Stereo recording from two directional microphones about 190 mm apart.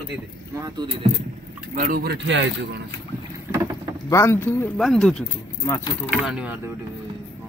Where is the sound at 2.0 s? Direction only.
70° right (ahead or behind).